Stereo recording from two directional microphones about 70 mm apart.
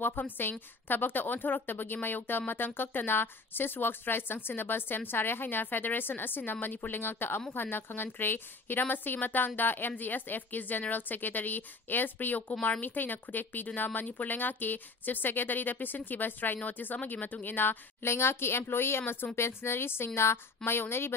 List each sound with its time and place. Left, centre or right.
0.0 s a woman's voice: left